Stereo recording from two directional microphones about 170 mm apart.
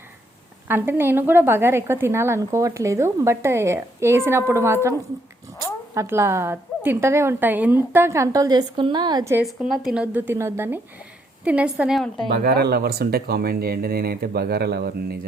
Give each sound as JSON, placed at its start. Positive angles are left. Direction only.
{"t": 0.7, "sound": "a woman's voice", "side_deg": -15}
{"t": 9.3, "sound": "a woman's voice", "side_deg": -5}
{"t": 12.3, "sound": "speech", "side_deg": -65}